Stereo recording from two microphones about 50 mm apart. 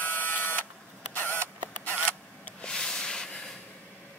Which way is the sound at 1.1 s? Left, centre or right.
Left.